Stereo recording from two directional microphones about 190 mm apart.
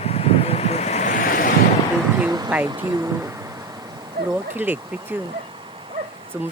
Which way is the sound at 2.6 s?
20° right (ahead or behind).